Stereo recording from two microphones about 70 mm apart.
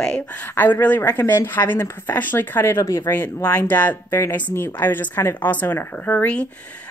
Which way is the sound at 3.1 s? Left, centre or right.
Left.